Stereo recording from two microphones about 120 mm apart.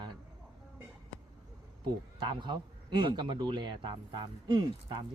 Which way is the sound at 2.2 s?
40° right (ahead or behind).